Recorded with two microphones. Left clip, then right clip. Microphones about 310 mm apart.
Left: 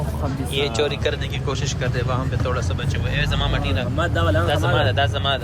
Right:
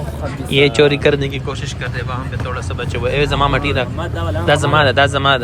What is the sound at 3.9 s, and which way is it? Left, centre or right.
Speech, left.